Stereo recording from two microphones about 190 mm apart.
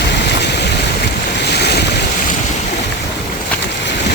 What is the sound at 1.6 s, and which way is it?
Boat, 60° left (ahead or behind).